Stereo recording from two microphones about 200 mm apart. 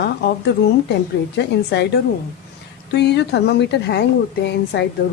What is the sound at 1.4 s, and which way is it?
Speech, 60° left (ahead or behind).